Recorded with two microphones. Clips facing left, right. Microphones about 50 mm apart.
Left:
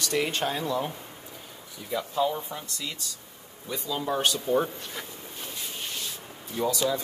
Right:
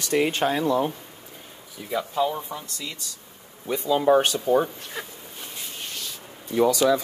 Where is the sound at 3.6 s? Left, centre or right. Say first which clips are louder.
Right 10 dB; right.